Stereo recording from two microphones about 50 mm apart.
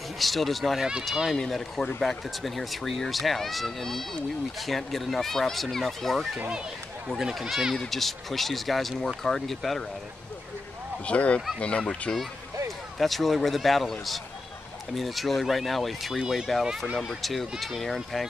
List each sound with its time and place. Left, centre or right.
0.2 s speech: centre
1.1 s speech: centre
1.4 s speech: centre
11.1 s speech: left
13.0 s speech: centre